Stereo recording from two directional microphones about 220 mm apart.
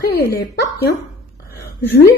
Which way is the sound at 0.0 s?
45° left (ahead or behind).